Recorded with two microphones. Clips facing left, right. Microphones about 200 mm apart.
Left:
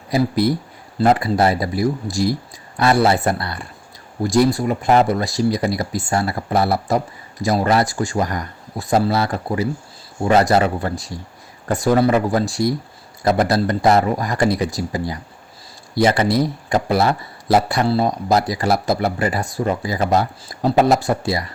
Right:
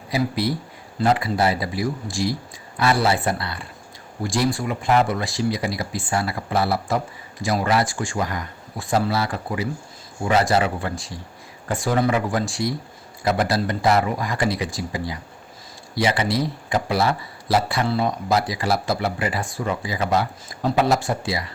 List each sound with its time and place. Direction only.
0.1 s speech: 45° left (ahead or behind)